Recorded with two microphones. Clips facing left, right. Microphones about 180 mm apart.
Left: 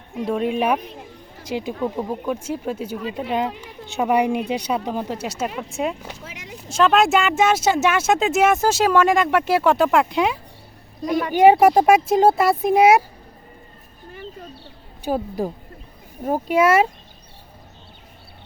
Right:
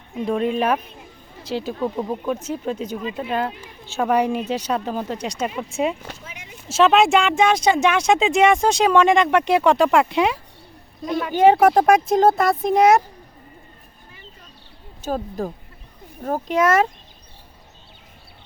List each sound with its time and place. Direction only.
0.3 s speech: 5° left (ahead or behind)
11.3 s speech: 10° left (ahead or behind)
14.1 s a sound: 50° left (ahead or behind)
15.0 s speech: 10° left (ahead or behind)